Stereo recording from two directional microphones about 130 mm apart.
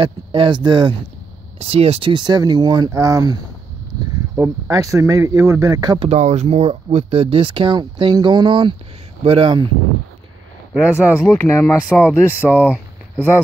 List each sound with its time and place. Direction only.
0.0 s speech: 40° right (ahead or behind)
1.6 s speech: 50° right (ahead or behind); by 3.3 s 25° right (ahead or behind)
4.4 s speech: 25° right (ahead or behind)
5.9 s speech: 55° right (ahead or behind); by 9.7 s 40° right (ahead or behind)
10.7 s speech: 10° right (ahead or behind)
11.1 s speech: 20° left (ahead or behind)
12.3 s speech: 10° right (ahead or behind)